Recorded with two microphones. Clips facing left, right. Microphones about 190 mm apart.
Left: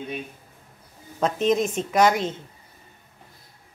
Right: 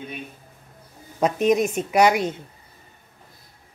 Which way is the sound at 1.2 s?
10° right (ahead or behind).